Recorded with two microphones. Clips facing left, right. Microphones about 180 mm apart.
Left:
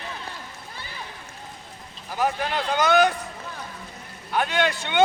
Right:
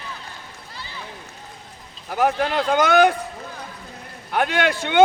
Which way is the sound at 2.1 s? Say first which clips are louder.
Right 5 dB; 60° right (ahead or behind).